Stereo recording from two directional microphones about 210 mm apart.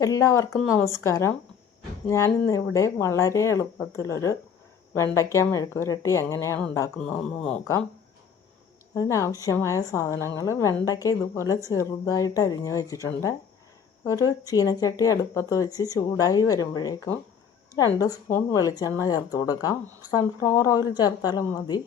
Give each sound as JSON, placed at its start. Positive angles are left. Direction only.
{"t": 0.0, "sound": "speech", "side_deg": 15}
{"t": 9.0, "sound": "speech", "side_deg": 15}